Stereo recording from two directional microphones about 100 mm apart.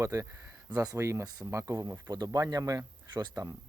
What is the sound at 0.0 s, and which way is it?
Speech, 30° right (ahead or behind).